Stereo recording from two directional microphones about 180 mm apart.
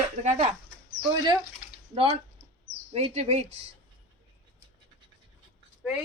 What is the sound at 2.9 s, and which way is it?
Speech, 35° right (ahead or behind).